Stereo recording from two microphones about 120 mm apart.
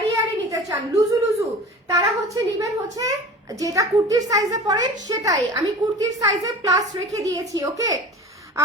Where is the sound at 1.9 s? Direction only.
30° right (ahead or behind).